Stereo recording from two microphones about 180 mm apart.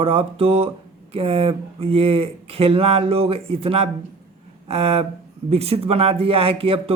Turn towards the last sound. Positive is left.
turn(degrees=-30)  # may be behind; listen again after turning